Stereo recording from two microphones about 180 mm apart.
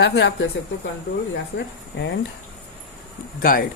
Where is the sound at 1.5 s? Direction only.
80° left.